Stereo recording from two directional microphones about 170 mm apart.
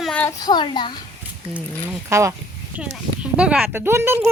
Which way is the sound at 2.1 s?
15° right (ahead or behind).